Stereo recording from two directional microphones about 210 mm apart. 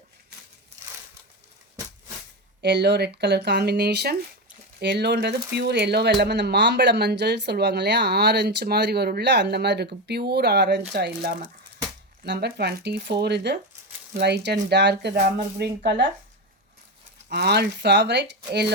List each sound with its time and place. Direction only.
2.6 s speech: 55° right (ahead or behind)
17.3 s speech: 50° right (ahead or behind)